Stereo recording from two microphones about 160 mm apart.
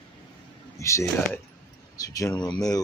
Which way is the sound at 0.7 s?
20° left (ahead or behind).